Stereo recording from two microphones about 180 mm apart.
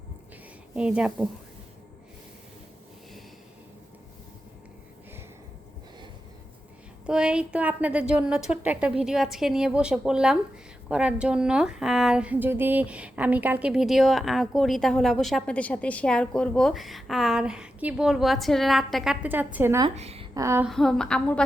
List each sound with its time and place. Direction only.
0.8 s a woman's voice: 5° right (ahead or behind)
7.0 s a woman's voice: 5° right (ahead or behind)
20.0 s a woman's voice: 35° right (ahead or behind)
20.3 s a sound: 15° right (ahead or behind)
20.7 s a woman's voice: centre (ahead or behind)